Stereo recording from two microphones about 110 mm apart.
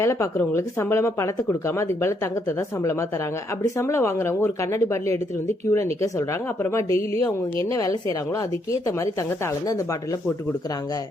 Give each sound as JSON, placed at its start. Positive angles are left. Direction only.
{"t": 0.0, "sound": "speech", "side_deg": 25}